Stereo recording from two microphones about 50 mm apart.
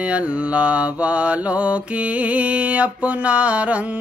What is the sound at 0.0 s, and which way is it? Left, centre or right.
Mantra, right.